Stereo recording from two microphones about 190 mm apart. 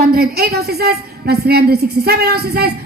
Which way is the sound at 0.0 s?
55° right (ahead or behind).